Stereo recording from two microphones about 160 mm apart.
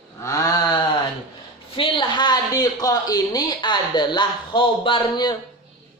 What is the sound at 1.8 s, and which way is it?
Speech, 30° left (ahead or behind).